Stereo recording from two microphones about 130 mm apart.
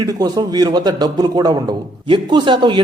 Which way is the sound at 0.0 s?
30° right (ahead or behind).